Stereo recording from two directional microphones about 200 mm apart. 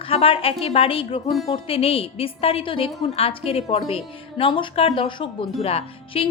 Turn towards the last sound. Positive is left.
turn(degrees=30)  # may be behind; listen again after turning